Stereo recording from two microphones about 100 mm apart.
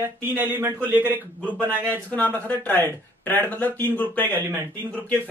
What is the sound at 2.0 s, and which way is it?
Speech, 15° left (ahead or behind).